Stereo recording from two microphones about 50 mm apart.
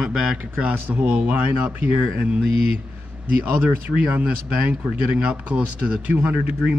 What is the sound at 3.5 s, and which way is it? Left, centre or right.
Speech, right.